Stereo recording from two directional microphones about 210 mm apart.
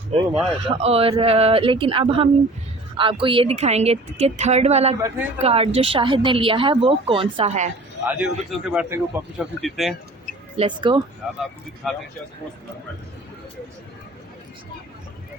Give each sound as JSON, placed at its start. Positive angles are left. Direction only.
{"t": 0.1, "sound": "a woman's voice", "side_deg": -30}
{"t": 8.0, "sound": "a man's voice", "side_deg": -5}
{"t": 10.6, "sound": "a woman's voice", "side_deg": -20}
{"t": 11.8, "sound": "a man's voice", "side_deg": 0}